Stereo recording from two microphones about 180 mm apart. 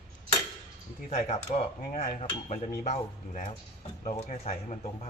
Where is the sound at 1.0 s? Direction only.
40° left (ahead or behind).